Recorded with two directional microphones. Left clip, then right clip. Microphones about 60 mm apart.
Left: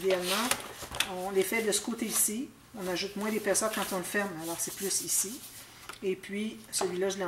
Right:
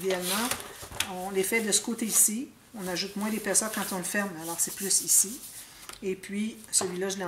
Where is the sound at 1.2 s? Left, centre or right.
Right.